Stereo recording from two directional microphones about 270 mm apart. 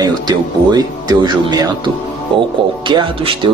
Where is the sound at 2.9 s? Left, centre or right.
Centre.